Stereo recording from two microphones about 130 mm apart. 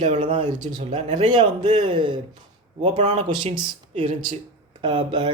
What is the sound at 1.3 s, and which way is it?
Speech, 35° right (ahead or behind).